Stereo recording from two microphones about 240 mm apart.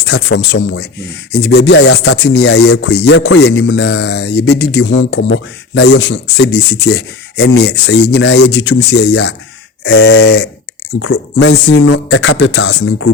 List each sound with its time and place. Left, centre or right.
0.0 s speech: left